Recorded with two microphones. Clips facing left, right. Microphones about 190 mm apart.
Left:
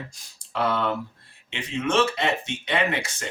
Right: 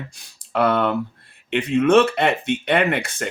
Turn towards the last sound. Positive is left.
turn(degrees=-60)  # may be behind; listen again after turning